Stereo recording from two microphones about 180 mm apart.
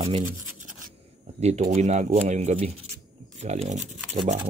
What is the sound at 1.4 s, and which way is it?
Speech, 40° right (ahead or behind).